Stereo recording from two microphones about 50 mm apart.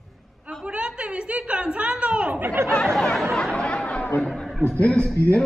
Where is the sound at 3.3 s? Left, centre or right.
Centre.